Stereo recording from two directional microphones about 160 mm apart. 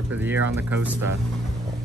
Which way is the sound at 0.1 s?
10° right (ahead or behind).